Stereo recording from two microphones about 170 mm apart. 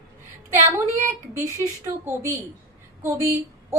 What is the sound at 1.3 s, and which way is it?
Speech, 15° right (ahead or behind).